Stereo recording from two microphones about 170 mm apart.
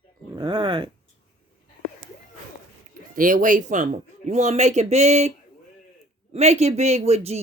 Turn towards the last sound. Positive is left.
turn(degrees=-40)  # may be behind; listen again after turning